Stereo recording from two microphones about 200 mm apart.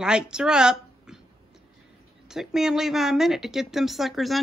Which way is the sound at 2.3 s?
Centre (ahead or behind).